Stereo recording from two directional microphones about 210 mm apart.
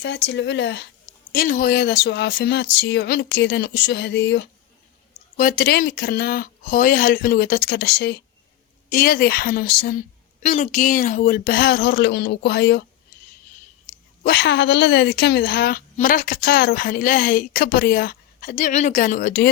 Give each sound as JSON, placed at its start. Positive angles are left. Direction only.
{"t": 0.0, "sound": "speech", "side_deg": 55}
{"t": 1.3, "sound": "a woman's voice", "side_deg": 45}
{"t": 5.4, "sound": "a woman's voice", "side_deg": 45}
{"t": 10.4, "sound": "a woman's voice", "side_deg": 35}
{"t": 13.8, "sound": "a woman's voice", "side_deg": 50}